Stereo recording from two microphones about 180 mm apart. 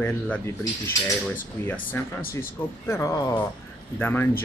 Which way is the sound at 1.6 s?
15° left (ahead or behind).